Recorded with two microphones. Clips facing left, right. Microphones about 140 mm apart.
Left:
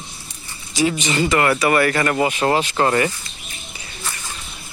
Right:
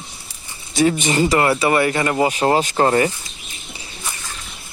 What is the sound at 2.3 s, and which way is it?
Speech, 35° right (ahead or behind).